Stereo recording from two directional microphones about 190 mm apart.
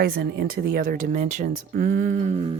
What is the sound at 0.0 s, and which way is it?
Speech, 50° right (ahead or behind).